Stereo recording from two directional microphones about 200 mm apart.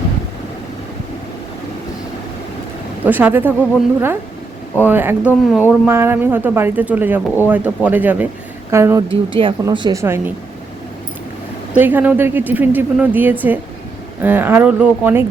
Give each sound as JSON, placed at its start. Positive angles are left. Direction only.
{"t": 3.0, "sound": "speech", "side_deg": -10}
{"t": 4.8, "sound": "speech", "side_deg": -10}
{"t": 9.0, "sound": "speech", "side_deg": -25}
{"t": 11.7, "sound": "speech", "side_deg": -10}